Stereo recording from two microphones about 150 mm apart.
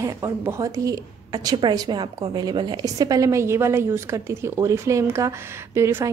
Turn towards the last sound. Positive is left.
turn(degrees=-15)  # may be behind; listen again after turning